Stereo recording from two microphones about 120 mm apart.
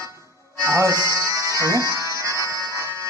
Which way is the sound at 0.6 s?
25° right (ahead or behind).